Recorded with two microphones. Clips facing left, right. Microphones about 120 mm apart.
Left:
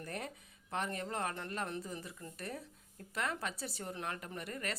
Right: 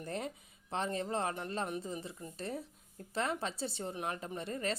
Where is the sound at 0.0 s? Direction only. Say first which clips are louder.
Right 4 dB; 25° right (ahead or behind).